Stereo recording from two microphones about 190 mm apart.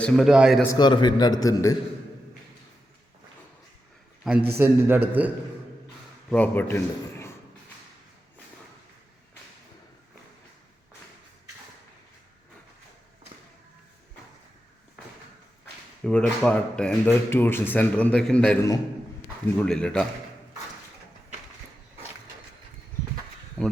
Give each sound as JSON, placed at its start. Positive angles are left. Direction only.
{"t": 0.0, "sound": "a man's voice", "side_deg": 0}
{"t": 0.6, "sound": "a man's voice", "side_deg": 20}
{"t": 4.2, "sound": "a man's voice", "side_deg": -5}
{"t": 6.3, "sound": "speech", "side_deg": 10}
{"t": 16.0, "sound": "speech", "side_deg": 5}
{"t": 19.5, "sound": "a man's voice", "side_deg": 5}